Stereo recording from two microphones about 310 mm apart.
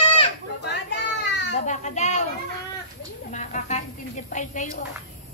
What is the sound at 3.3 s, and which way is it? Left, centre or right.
A child's voice, left.